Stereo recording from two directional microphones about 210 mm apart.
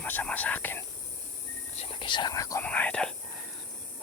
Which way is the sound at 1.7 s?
25° left (ahead or behind).